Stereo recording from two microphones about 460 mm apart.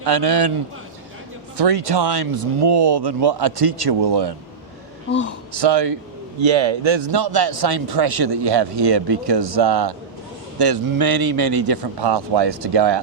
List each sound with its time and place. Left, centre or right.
0.0 s a man's voice: right
1.5 s speech: right
5.0 s speech: left
5.5 s a man's voice: right
6.4 s speech: right